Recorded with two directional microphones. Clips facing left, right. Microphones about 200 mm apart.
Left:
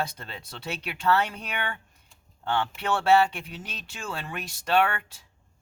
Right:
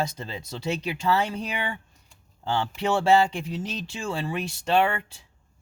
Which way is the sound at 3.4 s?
30° right (ahead or behind).